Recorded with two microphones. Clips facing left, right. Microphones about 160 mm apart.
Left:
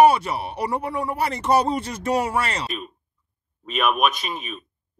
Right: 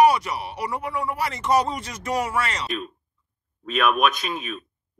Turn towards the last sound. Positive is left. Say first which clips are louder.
# right 2 dB
turn(degrees=5)  # may be behind; listen again after turning